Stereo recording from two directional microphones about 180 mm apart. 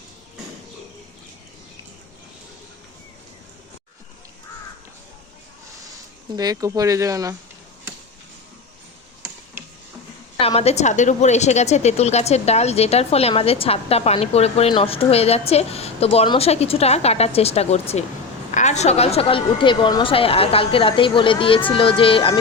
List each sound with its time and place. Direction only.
6.3 s speech: 20° right (ahead or behind)
10.4 s a woman's voice: 35° left (ahead or behind)